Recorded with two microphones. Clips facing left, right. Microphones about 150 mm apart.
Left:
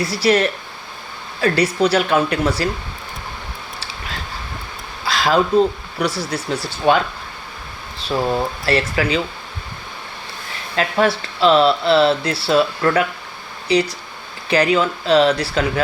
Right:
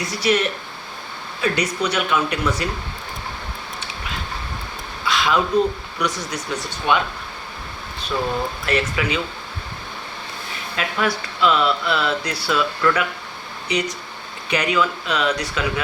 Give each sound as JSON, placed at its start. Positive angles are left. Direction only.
{"t": 0.0, "sound": "speech", "side_deg": 35}
{"t": 5.0, "sound": "speech", "side_deg": 35}
{"t": 8.6, "sound": "speech", "side_deg": 35}
{"t": 10.8, "sound": "speech", "side_deg": 30}